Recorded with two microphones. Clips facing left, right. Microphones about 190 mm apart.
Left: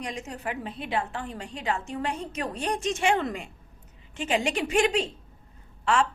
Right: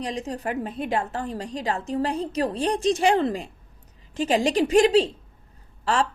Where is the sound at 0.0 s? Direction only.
35° right (ahead or behind).